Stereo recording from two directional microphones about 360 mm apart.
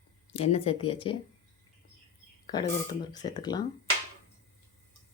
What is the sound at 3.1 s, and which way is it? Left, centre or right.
Speech, centre.